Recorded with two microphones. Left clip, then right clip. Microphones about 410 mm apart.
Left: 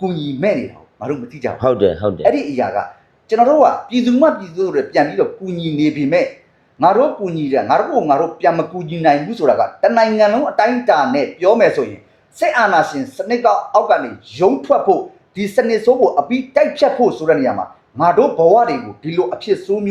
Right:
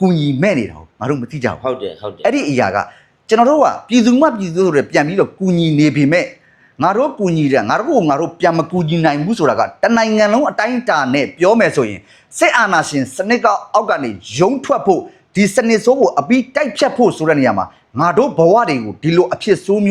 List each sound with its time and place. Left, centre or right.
0.0 s speech: right
1.6 s speech: left
2.2 s speech: right